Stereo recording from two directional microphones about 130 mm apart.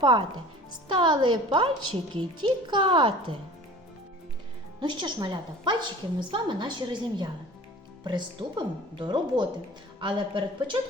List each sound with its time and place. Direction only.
0.0 s a woman's voice: 35° right (ahead or behind)
4.8 s a woman's voice: 35° right (ahead or behind)